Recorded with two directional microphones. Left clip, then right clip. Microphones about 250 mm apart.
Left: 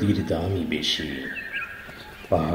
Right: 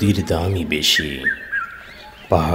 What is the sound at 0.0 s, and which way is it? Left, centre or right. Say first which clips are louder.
Speech: right 5 dB; right.